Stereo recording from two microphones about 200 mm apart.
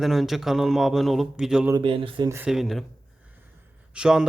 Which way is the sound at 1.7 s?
25° right (ahead or behind).